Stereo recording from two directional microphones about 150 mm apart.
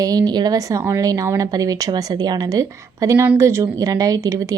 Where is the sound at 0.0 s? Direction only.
25° right (ahead or behind).